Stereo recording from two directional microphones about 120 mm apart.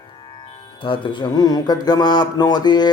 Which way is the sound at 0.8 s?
45° left (ahead or behind).